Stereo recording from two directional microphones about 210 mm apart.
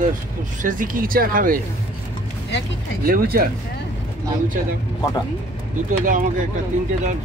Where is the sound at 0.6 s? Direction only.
40° right (ahead or behind).